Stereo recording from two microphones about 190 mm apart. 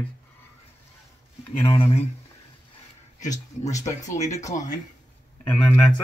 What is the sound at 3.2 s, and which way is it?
Speech, 40° left (ahead or behind).